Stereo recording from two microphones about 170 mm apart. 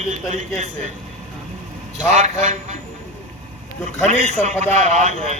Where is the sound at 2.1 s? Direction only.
45° right (ahead or behind).